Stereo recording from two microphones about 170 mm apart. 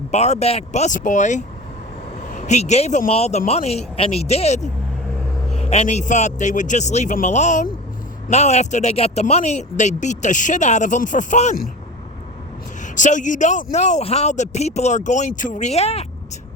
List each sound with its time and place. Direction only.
0.1 s speech: 40° left (ahead or behind)
12.8 s speech: 45° left (ahead or behind)